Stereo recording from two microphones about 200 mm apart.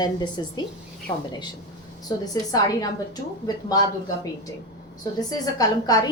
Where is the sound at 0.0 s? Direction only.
20° left (ahead or behind).